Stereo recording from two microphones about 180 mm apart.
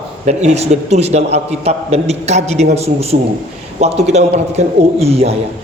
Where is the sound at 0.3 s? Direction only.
40° right (ahead or behind).